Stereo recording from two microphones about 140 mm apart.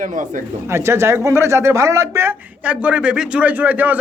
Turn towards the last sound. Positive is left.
turn(degrees=-10)  # may be behind; listen again after turning